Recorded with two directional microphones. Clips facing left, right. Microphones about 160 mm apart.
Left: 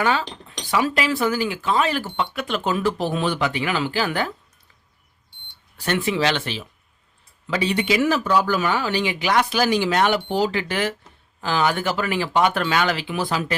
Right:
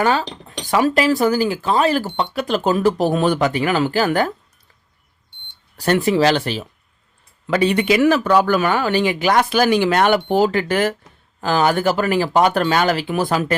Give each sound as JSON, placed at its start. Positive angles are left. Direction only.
{"t": 0.0, "sound": "speech", "side_deg": -40}
{"t": 5.7, "sound": "speech", "side_deg": -40}
{"t": 7.4, "sound": "speech", "side_deg": -55}